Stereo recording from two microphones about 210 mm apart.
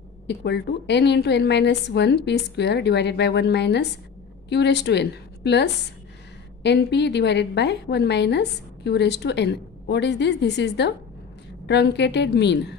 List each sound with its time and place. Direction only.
0.3 s a woman's voice: 55° left (ahead or behind)